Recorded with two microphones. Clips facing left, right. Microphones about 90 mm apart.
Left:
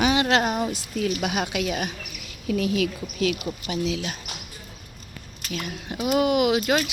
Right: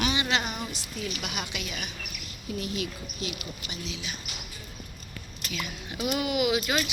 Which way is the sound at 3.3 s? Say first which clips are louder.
Left 10 dB; 75° left (ahead or behind).